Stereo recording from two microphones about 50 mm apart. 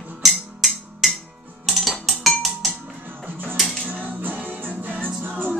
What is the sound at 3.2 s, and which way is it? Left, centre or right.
Music, right.